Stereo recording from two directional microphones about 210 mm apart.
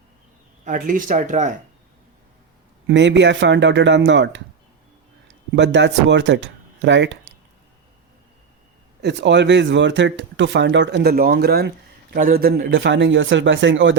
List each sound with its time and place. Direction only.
0.6 s speech: 40° right (ahead or behind)
2.8 s speech: 60° right (ahead or behind)
5.5 s speech: 55° right (ahead or behind)
9.0 s speech: 55° right (ahead or behind)